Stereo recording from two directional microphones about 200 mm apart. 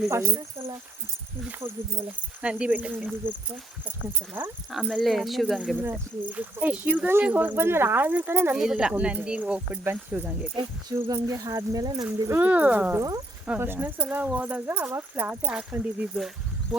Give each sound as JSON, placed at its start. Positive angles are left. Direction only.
{"t": 0.1, "sound": "speech", "side_deg": -15}
{"t": 2.4, "sound": "speech", "side_deg": -5}
{"t": 4.4, "sound": "speech", "side_deg": -10}
{"t": 10.5, "sound": "speech", "side_deg": -20}